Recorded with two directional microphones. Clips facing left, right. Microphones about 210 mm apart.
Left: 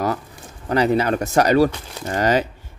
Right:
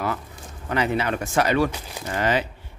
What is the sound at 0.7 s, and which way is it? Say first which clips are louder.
Speech: left 6 dB; 40° left (ahead or behind).